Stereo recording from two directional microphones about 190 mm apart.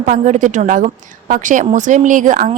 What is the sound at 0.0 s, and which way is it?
Speech, 40° right (ahead or behind).